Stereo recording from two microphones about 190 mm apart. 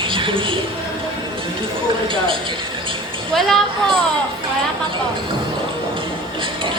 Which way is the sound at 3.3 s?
Centre (ahead or behind).